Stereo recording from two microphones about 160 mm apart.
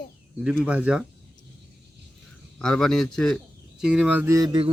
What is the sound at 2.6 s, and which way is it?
Speech, 5° left (ahead or behind).